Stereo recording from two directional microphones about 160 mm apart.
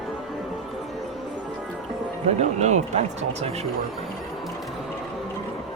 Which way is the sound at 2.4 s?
45° right (ahead or behind).